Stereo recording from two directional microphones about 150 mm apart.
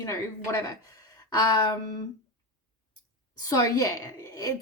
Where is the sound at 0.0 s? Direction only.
20° left (ahead or behind).